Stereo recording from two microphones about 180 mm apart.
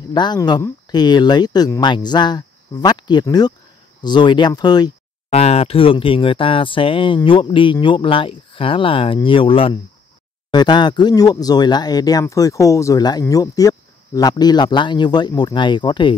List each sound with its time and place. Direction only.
0.1 s speech: 25° left (ahead or behind)
5.3 s speech: 35° left (ahead or behind)